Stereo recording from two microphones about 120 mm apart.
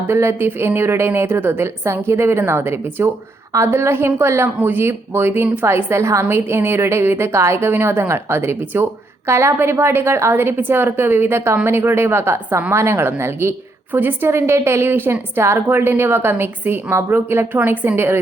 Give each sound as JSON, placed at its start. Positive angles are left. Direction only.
{"t": 0.1, "sound": "a woman's voice", "side_deg": -20}